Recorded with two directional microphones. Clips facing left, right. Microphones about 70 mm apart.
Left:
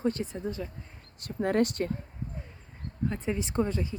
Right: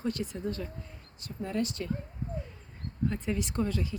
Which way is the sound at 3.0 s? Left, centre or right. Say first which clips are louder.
Left 1 dB; centre.